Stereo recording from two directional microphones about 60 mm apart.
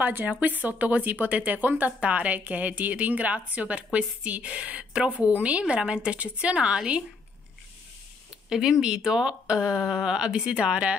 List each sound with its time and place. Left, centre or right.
0.0 s speech: right
8.5 s speech: centre